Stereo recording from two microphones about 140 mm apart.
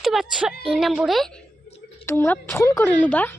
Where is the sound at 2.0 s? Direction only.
15° left (ahead or behind).